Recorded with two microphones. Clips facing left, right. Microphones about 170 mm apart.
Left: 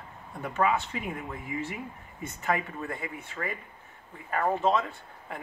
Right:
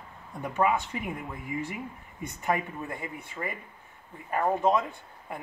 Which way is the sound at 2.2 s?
15° right (ahead or behind).